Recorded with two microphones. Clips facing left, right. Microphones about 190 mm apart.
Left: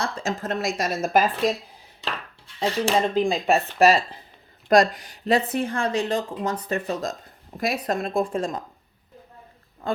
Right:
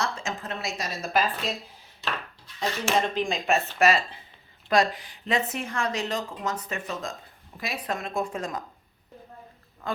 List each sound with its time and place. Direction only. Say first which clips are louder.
0.0 s a woman's voice: left 4 dB; 35° left (ahead or behind)
2.6 s speech: left 4 dB; 30° left (ahead or behind)